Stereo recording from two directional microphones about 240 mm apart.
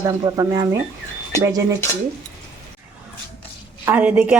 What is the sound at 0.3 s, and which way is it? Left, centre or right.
Speech, centre.